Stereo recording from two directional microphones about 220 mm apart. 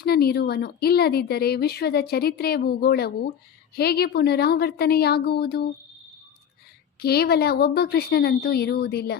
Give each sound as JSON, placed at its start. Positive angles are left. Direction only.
{"t": 0.0, "sound": "speech", "side_deg": 45}
{"t": 7.0, "sound": "speech", "side_deg": 45}